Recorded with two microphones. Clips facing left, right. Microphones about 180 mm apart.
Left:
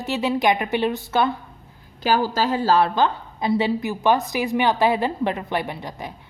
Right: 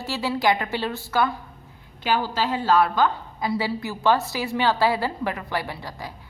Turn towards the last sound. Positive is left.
turn(degrees=20)  # may be behind; listen again after turning